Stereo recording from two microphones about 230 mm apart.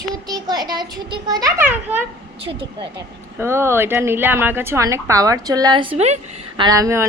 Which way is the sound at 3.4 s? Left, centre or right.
Centre.